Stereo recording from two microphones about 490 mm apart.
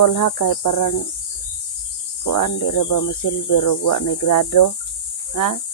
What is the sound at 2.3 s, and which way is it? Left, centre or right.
Speech, left.